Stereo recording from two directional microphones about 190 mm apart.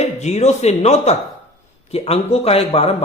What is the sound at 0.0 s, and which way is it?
A man's voice, 35° left (ahead or behind).